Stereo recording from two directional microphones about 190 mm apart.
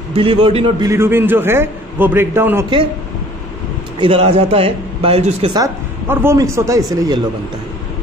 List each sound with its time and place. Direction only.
0.1 s speech: 30° right (ahead or behind)
0.8 s a man's voice: 15° right (ahead or behind)
4.0 s speech: 30° right (ahead or behind)
5.6 s a man's voice: 15° right (ahead or behind)